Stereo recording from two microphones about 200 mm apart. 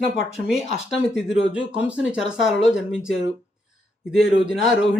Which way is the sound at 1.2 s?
5° right (ahead or behind).